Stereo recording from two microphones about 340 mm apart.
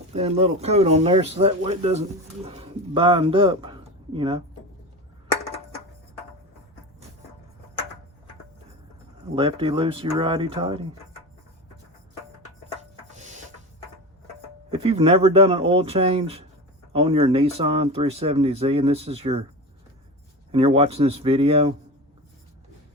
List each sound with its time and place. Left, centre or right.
0.2 s speech: centre
9.3 s speech: centre
13.1 s music: right
14.7 s speech: centre
20.5 s speech: centre